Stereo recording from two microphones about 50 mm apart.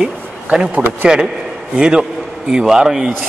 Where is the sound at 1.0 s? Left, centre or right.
Centre.